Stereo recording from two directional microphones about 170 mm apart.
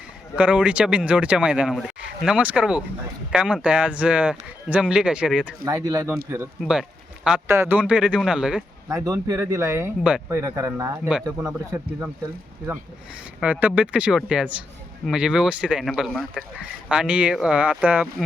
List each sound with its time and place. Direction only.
0.3 s speech: 5° right (ahead or behind)
5.6 s speech: 20° right (ahead or behind)
6.6 s speech: 5° right (ahead or behind)
8.9 s speech: 15° right (ahead or behind)
11.1 s speech: 5° right (ahead or behind)
13.4 s speech: 10° right (ahead or behind)